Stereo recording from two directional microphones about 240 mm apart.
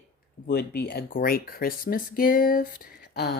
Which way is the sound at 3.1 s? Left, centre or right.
Left.